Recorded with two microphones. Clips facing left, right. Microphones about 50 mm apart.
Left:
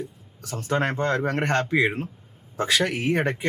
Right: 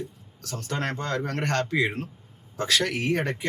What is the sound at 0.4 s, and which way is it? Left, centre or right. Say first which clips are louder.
A man's voice: left 5 dB; centre.